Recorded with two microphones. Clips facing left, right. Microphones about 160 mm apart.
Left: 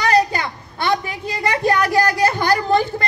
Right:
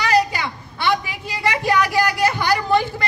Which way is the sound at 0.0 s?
45° left (ahead or behind).